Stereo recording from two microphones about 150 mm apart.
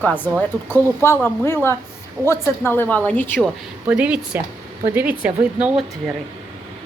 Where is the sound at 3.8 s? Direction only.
10° right (ahead or behind).